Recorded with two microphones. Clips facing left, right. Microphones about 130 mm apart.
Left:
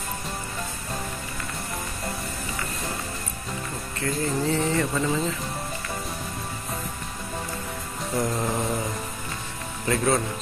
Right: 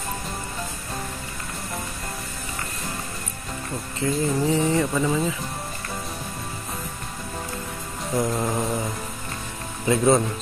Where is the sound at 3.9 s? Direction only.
15° right (ahead or behind).